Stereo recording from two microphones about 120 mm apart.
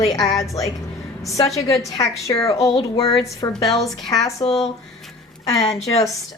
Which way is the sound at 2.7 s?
50° left (ahead or behind).